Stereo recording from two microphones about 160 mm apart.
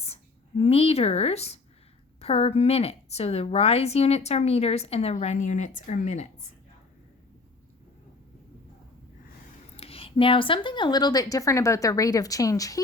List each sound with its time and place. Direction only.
0.0 s a woman's voice: 40° left (ahead or behind)
9.7 s speech: 35° left (ahead or behind); by 12.8 s 20° left (ahead or behind)